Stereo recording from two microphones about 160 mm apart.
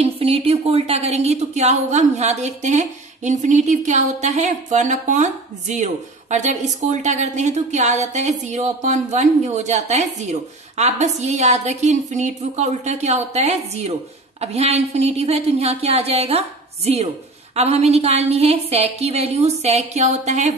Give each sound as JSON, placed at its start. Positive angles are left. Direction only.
{"t": 0.0, "sound": "a woman's voice", "side_deg": -35}